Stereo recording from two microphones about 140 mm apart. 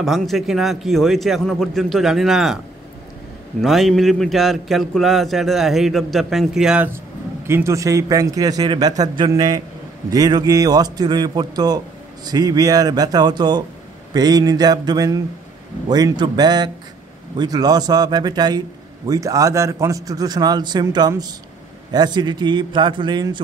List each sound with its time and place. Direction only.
0.0 s a man's voice: centre (ahead or behind)
3.6 s a man's voice: centre (ahead or behind)
7.4 s a man's voice: 20° right (ahead or behind)